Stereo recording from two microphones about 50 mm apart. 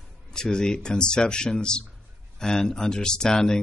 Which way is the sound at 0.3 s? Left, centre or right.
Centre.